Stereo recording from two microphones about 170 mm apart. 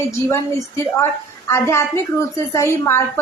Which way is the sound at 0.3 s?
15° left (ahead or behind).